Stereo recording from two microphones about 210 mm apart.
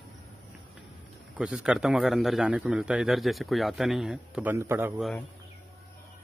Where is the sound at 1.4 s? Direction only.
5° right (ahead or behind).